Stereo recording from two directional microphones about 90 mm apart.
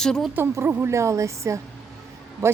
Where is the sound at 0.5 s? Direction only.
25° right (ahead or behind).